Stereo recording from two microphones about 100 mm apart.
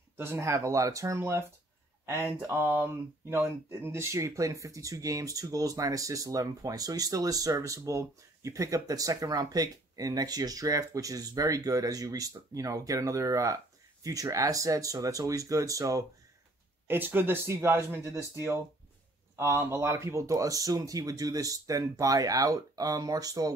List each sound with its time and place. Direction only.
0.2 s speech: 25° right (ahead or behind)
2.5 s speech: 20° right (ahead or behind); by 16.1 s 35° right (ahead or behind)
16.8 s speech: 20° right (ahead or behind); by 23.5 s 40° right (ahead or behind)